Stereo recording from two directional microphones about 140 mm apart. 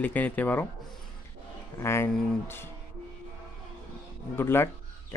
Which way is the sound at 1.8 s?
20° left (ahead or behind).